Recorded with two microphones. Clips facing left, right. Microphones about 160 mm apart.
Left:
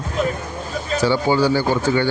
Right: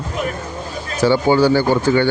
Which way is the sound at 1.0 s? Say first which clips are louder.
Right 4 dB; 60° right (ahead or behind).